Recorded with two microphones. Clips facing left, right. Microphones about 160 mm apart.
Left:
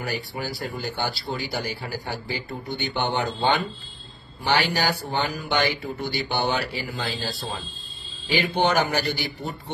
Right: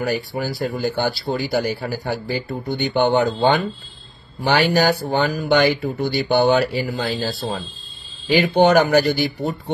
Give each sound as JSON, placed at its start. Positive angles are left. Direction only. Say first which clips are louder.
{"t": 0.0, "sound": "speech", "louder": "right 7 dB", "side_deg": -40}
{"t": 5.4, "sound": "speech", "louder": "right 8 dB", "side_deg": -65}
{"t": 6.2, "sound": "speech", "louder": "right 11 dB", "side_deg": -50}